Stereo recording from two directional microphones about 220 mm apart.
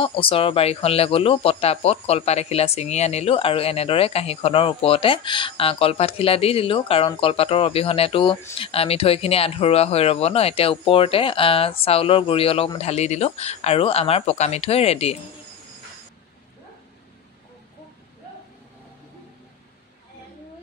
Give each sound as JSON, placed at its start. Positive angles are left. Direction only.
{"t": 0.0, "sound": "speech", "side_deg": 25}